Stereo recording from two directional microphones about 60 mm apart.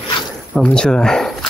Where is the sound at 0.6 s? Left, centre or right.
Centre.